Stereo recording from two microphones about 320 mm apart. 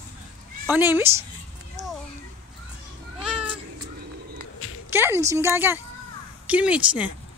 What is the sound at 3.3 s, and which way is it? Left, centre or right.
Cat, centre.